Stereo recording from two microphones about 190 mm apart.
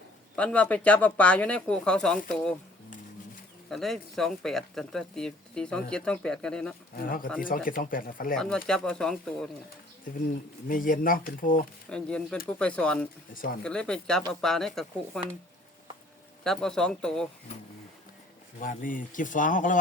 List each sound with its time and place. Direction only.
0.3 s speech: 5° left (ahead or behind)
3.7 s speech: centre (ahead or behind)
6.9 s speech: 50° left (ahead or behind)
8.4 s speech: 5° left (ahead or behind)
10.7 s speech: 45° left (ahead or behind)
11.9 s speech: 5° left (ahead or behind)
13.3 s speech: 45° left (ahead or behind)
13.7 s speech: 5° left (ahead or behind)
16.4 s speech: 5° left (ahead or behind)
18.6 s speech: 45° left (ahead or behind)